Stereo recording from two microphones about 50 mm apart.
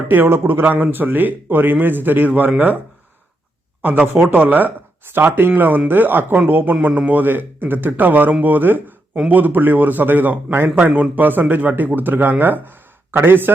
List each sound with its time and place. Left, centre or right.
0.1 s a man's voice: right
0.6 s a man's voice: right
4.3 s a man's voice: right
6.8 s a man's voice: right